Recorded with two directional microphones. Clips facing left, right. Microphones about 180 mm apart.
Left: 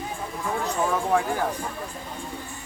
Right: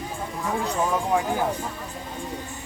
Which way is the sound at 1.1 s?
15° right (ahead or behind).